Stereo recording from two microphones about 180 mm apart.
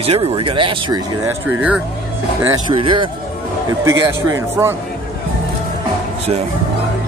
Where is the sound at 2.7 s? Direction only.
30° right (ahead or behind).